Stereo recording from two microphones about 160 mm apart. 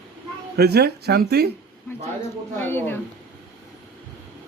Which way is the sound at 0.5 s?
90° right.